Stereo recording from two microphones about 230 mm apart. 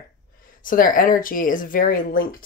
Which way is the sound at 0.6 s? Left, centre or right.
Left.